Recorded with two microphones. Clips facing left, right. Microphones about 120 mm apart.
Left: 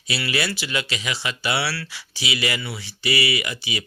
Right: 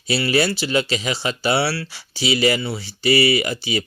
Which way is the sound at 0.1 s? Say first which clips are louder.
Right 7 dB; 35° right (ahead or behind).